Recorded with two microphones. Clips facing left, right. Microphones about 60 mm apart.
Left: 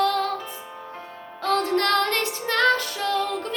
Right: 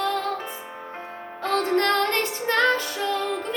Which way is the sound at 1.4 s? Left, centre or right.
Right.